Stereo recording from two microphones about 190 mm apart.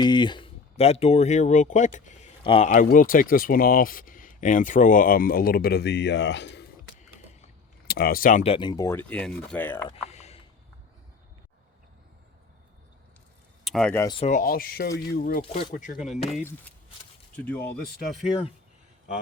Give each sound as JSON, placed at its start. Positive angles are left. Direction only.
{"t": 0.0, "sound": "speech", "side_deg": 25}
{"t": 2.4, "sound": "speech", "side_deg": 25}
{"t": 2.6, "sound": "speech", "side_deg": 45}
{"t": 7.9, "sound": "speech", "side_deg": 50}
{"t": 8.5, "sound": "speech", "side_deg": 20}
{"t": 9.9, "sound": "a sound", "side_deg": 35}
{"t": 13.7, "sound": "speech", "side_deg": 5}
{"t": 14.0, "sound": "speech", "side_deg": 25}
{"t": 14.3, "sound": "speech", "side_deg": 45}
{"t": 17.3, "sound": "speech", "side_deg": 10}